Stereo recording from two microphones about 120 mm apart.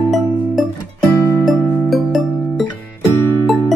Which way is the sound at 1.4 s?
Centre (ahead or behind).